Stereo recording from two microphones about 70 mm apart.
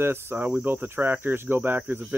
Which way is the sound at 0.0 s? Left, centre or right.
Right.